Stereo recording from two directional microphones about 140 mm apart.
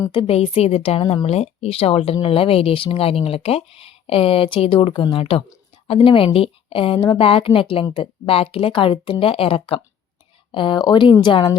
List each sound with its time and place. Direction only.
0.0 s a woman's voice: 35° left (ahead or behind)